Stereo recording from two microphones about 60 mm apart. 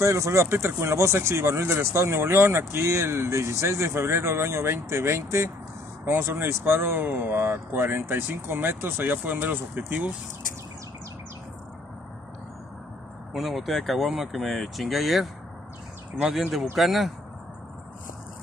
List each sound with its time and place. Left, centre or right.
0.0 s speech: right
13.3 s speech: centre
16.7 s speech: centre